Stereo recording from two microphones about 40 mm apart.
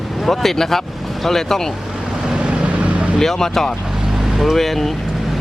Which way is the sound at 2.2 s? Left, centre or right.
Right.